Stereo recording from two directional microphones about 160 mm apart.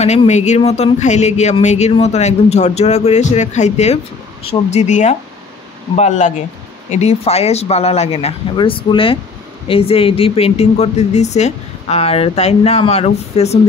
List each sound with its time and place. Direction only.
0.0 s speech: 45° left (ahead or behind)